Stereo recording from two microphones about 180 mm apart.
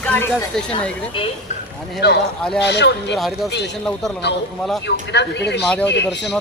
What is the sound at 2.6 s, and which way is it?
Speech, 70° left (ahead or behind).